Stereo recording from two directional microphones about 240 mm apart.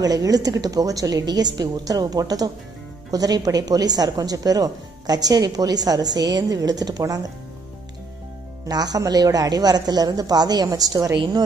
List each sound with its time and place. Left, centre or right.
0.0 s a woman's voice: centre
8.6 s a woman's voice: centre